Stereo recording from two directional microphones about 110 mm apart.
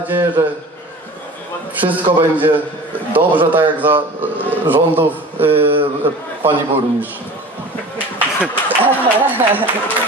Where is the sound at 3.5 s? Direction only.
15° right (ahead or behind).